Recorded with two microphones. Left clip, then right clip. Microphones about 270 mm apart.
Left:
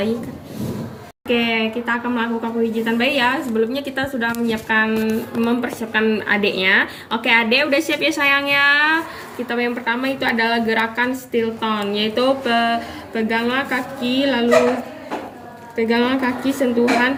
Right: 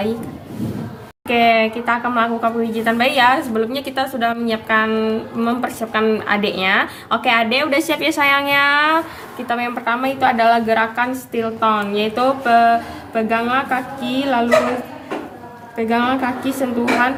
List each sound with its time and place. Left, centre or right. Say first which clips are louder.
1.3 s speech: right 5 dB; right
15.7 s speech: even; right